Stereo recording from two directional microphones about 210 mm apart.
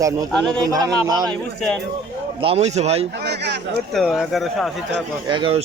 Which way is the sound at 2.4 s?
30° right (ahead or behind).